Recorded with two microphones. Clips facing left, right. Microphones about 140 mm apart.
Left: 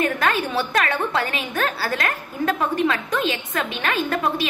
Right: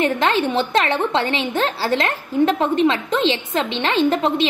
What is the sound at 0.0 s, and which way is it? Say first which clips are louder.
A woman's voice: right 4 dB; 25° right (ahead or behind).